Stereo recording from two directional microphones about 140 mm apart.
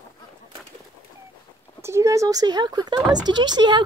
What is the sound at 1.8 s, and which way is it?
Speech, 20° right (ahead or behind).